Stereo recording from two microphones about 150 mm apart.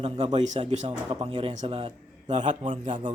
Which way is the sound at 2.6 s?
35° right (ahead or behind).